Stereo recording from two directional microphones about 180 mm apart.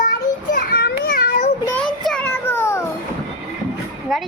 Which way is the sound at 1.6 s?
10° left (ahead or behind).